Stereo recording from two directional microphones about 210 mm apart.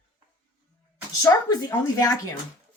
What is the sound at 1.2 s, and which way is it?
Speech, 20° left (ahead or behind).